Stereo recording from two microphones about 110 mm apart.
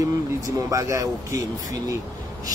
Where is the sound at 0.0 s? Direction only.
30° right (ahead or behind).